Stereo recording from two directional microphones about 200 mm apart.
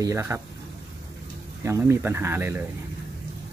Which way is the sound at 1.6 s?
10° right (ahead or behind).